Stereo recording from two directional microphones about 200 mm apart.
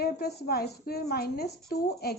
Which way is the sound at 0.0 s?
50° left (ahead or behind).